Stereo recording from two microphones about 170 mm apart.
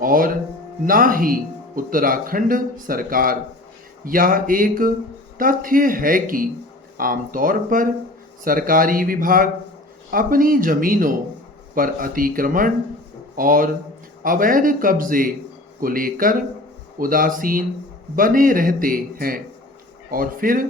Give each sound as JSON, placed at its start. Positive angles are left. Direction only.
{"t": 0.0, "sound": "a man's voice", "side_deg": -55}